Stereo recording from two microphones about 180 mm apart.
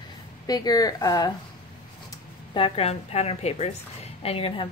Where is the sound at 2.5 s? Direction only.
30° left (ahead or behind).